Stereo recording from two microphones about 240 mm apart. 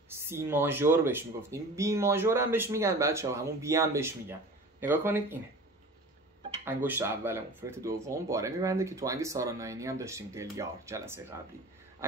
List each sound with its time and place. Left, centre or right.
0.1 s speech: centre
6.6 s speech: centre